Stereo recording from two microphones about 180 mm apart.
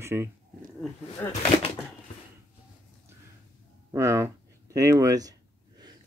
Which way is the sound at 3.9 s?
15° right (ahead or behind).